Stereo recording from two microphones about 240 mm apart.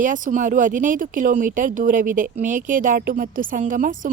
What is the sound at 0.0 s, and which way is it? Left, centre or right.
Speech, right.